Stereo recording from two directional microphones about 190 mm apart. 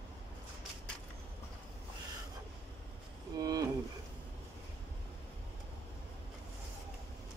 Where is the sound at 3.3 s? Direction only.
20° right (ahead or behind).